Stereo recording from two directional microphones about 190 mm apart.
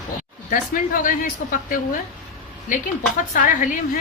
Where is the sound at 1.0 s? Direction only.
45° left (ahead or behind).